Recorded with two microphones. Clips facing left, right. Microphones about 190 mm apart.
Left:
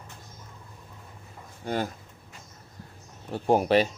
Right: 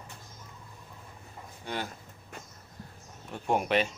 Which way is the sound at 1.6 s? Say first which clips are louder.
Left 7 dB; 45° left (ahead or behind).